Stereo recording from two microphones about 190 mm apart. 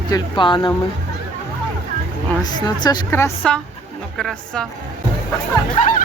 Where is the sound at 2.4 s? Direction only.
20° left (ahead or behind); by 4.6 s 5° left (ahead or behind).